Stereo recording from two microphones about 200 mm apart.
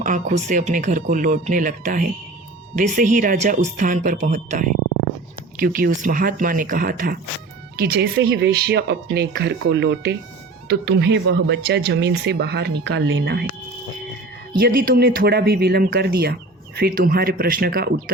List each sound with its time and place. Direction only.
0.0 s speech: 40° right (ahead or behind); by 13.5 s 55° right (ahead or behind)
14.6 s speech: 45° right (ahead or behind)